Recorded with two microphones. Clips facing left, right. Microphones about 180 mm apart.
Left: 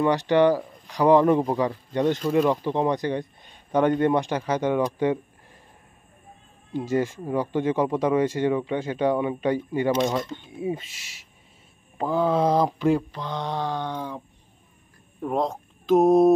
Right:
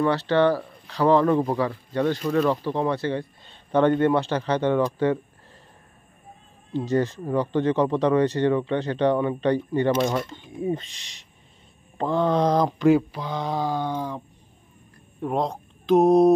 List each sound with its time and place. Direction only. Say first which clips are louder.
0.0 s speech: left 1 dB; 15° left (ahead or behind)
6.7 s speech: right 1 dB; 10° left (ahead or behind)